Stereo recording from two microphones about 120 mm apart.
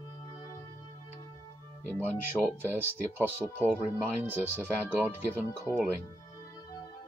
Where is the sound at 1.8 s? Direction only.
20° left (ahead or behind).